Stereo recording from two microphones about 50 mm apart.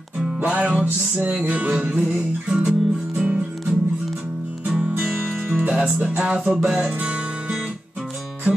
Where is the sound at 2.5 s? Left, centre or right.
Centre.